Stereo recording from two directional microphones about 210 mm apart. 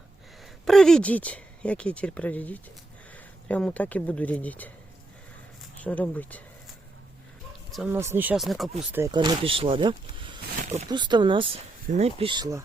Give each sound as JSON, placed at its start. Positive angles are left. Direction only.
{"t": 0.6, "sound": "speech", "side_deg": 0}
{"t": 5.8, "sound": "speech", "side_deg": 5}
{"t": 7.7, "sound": "speech", "side_deg": 0}
{"t": 9.1, "sound": "speech", "side_deg": -20}